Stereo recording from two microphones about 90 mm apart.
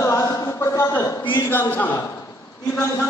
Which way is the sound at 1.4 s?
25° left (ahead or behind).